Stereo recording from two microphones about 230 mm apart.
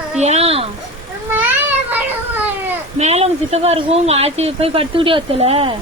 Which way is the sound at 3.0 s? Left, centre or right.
Right.